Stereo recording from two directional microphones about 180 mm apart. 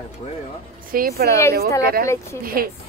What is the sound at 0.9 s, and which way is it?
Speech, 55° right (ahead or behind).